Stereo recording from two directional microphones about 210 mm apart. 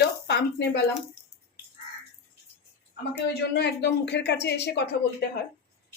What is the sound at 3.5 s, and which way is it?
Speech, 55° left (ahead or behind).